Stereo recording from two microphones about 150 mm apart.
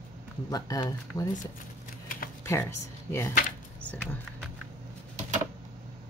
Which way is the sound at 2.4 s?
20° left (ahead or behind).